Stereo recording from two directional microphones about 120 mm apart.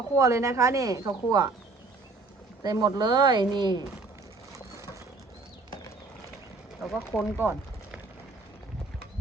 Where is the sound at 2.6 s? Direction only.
35° right (ahead or behind).